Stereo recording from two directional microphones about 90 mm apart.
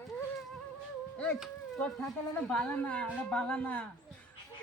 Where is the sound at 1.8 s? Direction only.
5° left (ahead or behind).